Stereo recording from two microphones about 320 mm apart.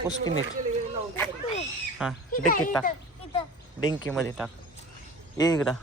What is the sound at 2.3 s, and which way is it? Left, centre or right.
Speech, left.